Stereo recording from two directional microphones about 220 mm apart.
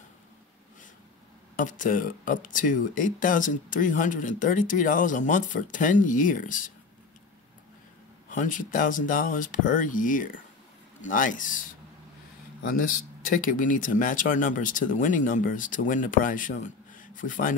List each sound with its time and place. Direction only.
1.6 s speech: 35° left (ahead or behind)
8.3 s speech: 35° left (ahead or behind)
13.3 s speech: 40° left (ahead or behind)